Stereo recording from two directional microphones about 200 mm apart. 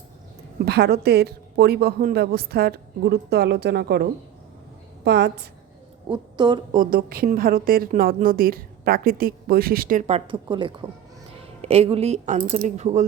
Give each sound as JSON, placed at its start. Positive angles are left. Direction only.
{"t": 0.6, "sound": "a woman's voice", "side_deg": -55}
{"t": 5.0, "sound": "a woman's voice", "side_deg": -55}
{"t": 6.1, "sound": "a woman's voice", "side_deg": -20}
{"t": 6.7, "sound": "a woman's voice", "side_deg": -45}